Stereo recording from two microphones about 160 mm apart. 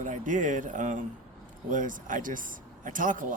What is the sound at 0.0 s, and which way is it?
A man's voice, 50° right (ahead or behind).